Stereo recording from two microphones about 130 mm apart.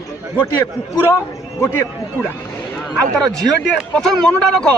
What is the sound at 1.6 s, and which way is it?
Speech, 20° left (ahead or behind).